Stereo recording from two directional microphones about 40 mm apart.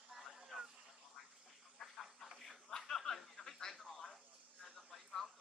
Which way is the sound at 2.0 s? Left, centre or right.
Centre.